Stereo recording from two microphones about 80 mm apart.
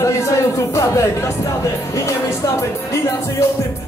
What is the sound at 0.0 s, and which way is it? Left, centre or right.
Music, left.